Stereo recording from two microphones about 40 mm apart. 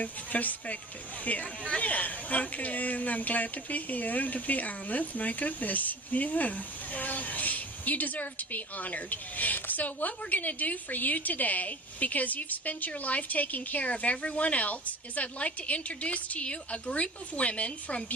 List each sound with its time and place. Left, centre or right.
0.0 s a woman's voice: left